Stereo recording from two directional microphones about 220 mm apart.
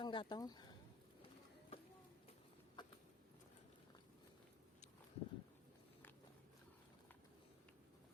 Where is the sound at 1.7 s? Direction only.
25° left (ahead or behind).